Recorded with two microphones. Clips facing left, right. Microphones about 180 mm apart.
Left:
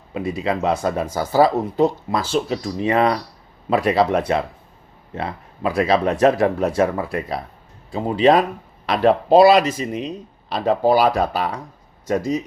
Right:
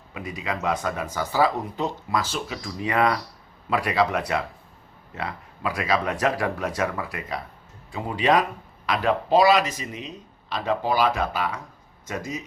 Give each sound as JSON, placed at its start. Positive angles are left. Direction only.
{"t": 0.1, "sound": "speech", "side_deg": 30}